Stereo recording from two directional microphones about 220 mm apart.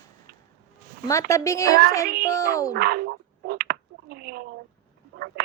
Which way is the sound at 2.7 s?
45° right (ahead or behind).